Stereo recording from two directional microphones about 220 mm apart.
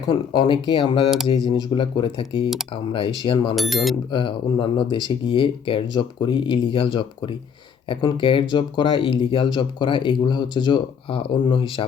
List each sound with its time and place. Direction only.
0.1 s speech: 20° left (ahead or behind)
3.5 s speech: centre (ahead or behind)
4.1 s speech: 20° left (ahead or behind)